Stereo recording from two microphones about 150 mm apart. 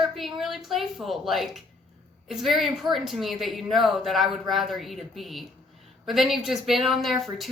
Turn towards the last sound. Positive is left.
turn(degrees=0)  # may be behind; listen again after turning